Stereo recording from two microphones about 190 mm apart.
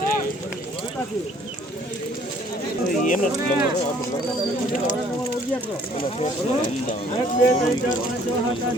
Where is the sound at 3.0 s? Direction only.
40° left (ahead or behind).